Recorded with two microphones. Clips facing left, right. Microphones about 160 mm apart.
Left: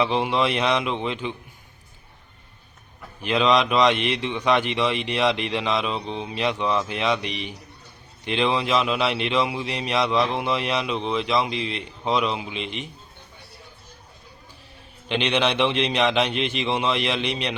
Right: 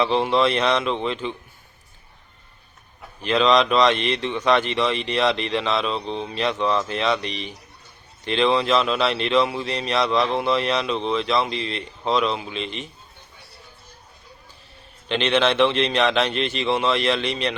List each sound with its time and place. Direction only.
0.0 s speech: 10° left (ahead or behind)
3.2 s speech: 10° left (ahead or behind)
15.1 s speech: 15° left (ahead or behind)